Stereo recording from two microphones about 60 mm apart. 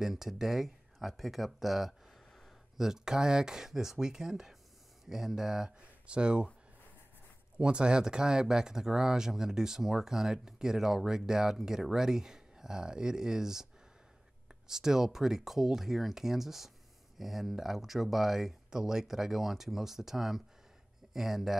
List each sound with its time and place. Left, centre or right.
0.0 s speech: centre
7.5 s speech: centre
14.7 s speech: centre